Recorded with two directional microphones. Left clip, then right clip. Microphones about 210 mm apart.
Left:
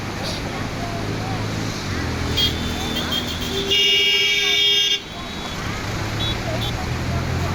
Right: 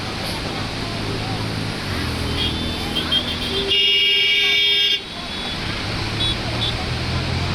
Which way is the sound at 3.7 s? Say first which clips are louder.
Even; 60° left (ahead or behind).